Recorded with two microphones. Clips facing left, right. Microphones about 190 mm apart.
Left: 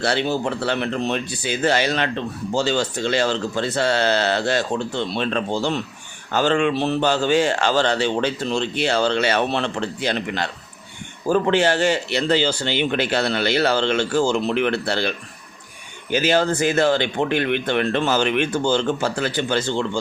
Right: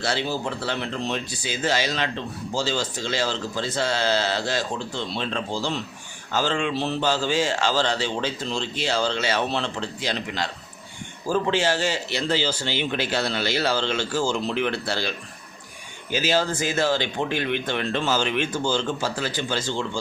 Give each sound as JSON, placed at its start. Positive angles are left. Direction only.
{"t": 0.0, "sound": "speech", "side_deg": 60}